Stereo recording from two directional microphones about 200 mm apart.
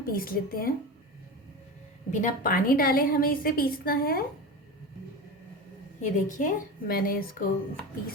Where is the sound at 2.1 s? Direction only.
40° left (ahead or behind).